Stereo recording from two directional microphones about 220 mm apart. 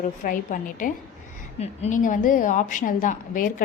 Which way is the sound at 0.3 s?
35° left (ahead or behind).